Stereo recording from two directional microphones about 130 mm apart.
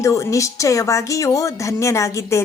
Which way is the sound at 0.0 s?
25° left (ahead or behind).